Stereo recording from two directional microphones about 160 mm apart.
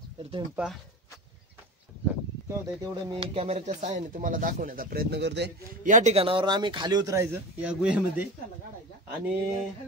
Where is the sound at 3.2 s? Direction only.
40° right (ahead or behind); by 5.5 s 90° right.